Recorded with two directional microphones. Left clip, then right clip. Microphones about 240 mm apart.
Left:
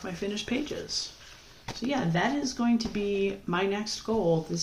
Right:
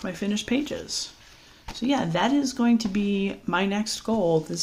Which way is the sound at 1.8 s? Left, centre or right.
Right.